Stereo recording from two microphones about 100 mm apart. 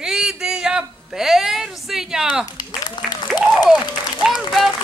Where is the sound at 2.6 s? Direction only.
45° left (ahead or behind).